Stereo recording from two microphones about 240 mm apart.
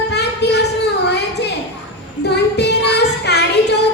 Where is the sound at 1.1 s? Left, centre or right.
Left.